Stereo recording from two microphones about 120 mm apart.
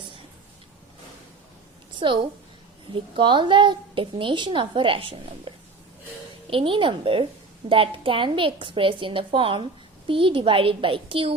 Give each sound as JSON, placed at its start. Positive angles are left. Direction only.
{"t": 2.0, "sound": "a woman's voice", "side_deg": -45}